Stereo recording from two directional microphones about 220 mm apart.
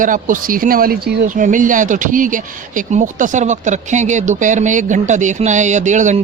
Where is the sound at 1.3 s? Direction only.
35° right (ahead or behind).